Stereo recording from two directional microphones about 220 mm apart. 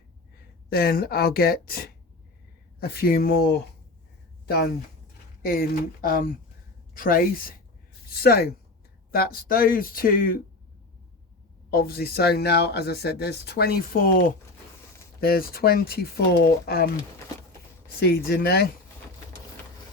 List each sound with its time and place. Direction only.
0.7 s speech: 45° left (ahead or behind)
5.5 s speech: 40° left (ahead or behind)
11.7 s speech: 45° left (ahead or behind)
18.0 s speech: 45° left (ahead or behind)